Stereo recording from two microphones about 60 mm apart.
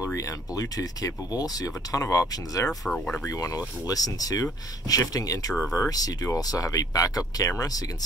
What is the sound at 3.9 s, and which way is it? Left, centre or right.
Speech, left.